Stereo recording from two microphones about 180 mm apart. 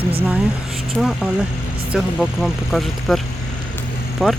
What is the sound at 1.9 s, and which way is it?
Speech, 5° right (ahead or behind).